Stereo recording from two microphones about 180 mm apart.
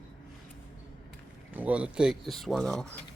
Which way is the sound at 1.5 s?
10° right (ahead or behind).